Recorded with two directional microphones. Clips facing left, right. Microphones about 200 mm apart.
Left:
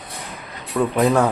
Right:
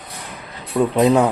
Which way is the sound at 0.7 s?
20° right (ahead or behind).